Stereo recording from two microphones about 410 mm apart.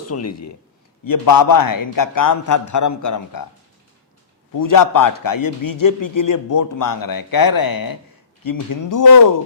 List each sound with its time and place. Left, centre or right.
0.0 s speech: left
1.0 s a man's voice: left
4.5 s a man's voice: left